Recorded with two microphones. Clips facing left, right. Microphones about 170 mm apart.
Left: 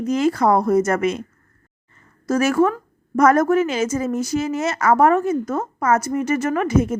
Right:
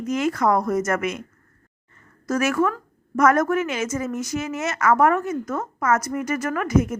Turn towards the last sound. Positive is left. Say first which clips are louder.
# left 3 dB
turn(degrees=30)  # may be behind; listen again after turning